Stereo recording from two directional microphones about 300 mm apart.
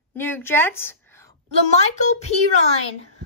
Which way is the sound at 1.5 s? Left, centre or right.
Left.